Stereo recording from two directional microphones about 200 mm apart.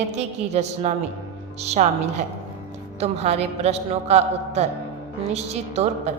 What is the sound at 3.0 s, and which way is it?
A woman's voice, 30° right (ahead or behind).